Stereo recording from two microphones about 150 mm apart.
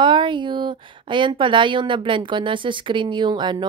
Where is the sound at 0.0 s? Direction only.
30° right (ahead or behind).